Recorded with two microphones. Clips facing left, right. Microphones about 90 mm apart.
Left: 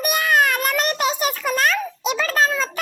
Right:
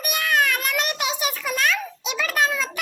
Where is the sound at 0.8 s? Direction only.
40° left (ahead or behind).